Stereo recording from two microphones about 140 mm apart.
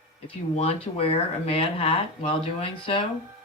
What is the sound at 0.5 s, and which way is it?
Speech, 45° left (ahead or behind).